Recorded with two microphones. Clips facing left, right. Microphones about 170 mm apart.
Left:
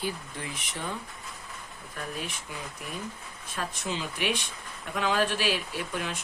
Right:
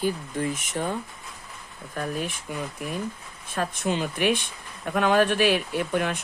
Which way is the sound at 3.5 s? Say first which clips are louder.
Right 7 dB; 55° right (ahead or behind).